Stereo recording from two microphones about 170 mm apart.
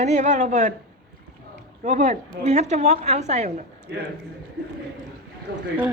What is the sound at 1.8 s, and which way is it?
A woman's voice, 45° right (ahead or behind).